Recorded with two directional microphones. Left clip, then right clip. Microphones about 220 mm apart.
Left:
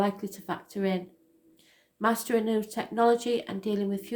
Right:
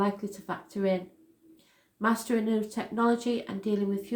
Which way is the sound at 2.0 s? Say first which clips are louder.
Left 2 dB; 40° left (ahead or behind).